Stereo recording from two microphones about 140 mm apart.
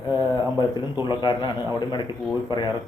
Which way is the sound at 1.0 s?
30° left (ahead or behind).